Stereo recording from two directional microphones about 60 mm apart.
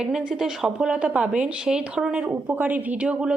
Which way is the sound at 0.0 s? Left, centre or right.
Centre.